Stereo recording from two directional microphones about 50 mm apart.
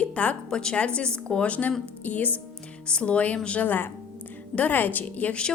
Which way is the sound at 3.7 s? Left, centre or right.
Left.